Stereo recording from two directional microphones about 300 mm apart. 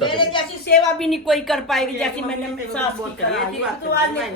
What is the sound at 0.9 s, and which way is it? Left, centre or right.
Speech, centre.